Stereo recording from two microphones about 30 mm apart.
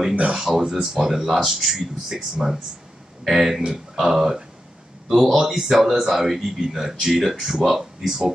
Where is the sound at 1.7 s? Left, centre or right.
Centre.